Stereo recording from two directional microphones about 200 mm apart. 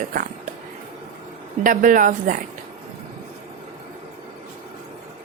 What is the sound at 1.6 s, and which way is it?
Speech, 40° right (ahead or behind).